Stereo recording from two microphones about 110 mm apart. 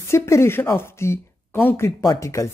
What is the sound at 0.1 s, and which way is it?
Speech, 25° left (ahead or behind).